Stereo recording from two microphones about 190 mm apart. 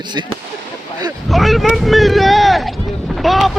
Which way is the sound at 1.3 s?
Centre (ahead or behind).